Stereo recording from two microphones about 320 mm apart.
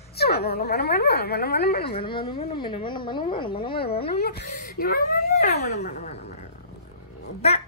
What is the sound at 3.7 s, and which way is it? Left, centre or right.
Speech, left.